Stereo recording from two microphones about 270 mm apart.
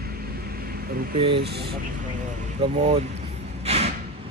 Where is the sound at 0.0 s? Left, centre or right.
Right.